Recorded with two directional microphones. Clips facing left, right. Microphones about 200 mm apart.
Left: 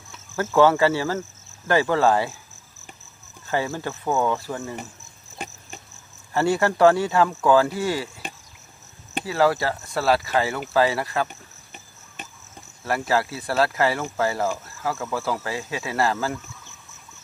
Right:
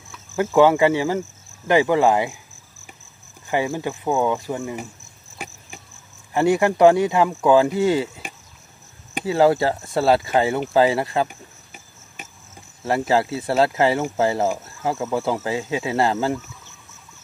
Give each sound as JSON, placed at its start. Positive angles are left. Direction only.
{"t": 0.4, "sound": "speech", "side_deg": -15}
{"t": 3.4, "sound": "speech", "side_deg": -15}
{"t": 6.3, "sound": "speech", "side_deg": -15}
{"t": 9.2, "sound": "speech", "side_deg": -25}
{"t": 11.2, "sound": "cricket", "side_deg": -10}
{"t": 12.8, "sound": "speech", "side_deg": -25}